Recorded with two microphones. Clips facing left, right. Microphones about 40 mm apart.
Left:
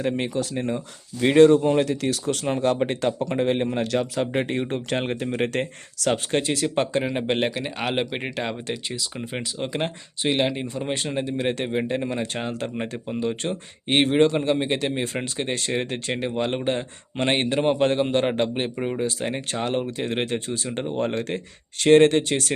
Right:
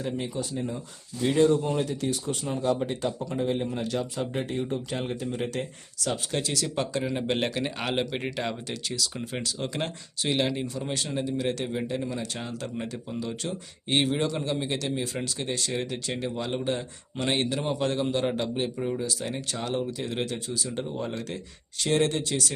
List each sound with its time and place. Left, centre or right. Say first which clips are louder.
0.0 s speech: left 6 dB; left
5.5 s speech: left 6 dB; left
6.3 s speech: left 6 dB; left
7.3 s a man's voice: left 3 dB; centre; by 22.5 s left